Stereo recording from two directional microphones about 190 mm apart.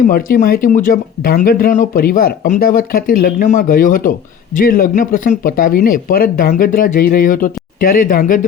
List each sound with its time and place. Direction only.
0.0 s speech: 50° left (ahead or behind)